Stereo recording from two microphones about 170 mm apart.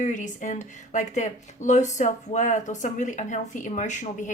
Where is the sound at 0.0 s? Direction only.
45° left (ahead or behind).